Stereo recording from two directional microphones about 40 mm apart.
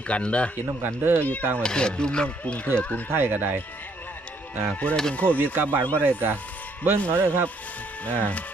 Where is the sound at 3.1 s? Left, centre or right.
Right.